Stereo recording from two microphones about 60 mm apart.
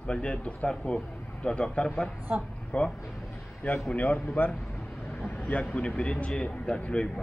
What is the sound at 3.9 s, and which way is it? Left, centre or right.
Speech, left.